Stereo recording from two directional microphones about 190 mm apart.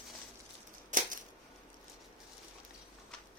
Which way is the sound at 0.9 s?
40° right (ahead or behind).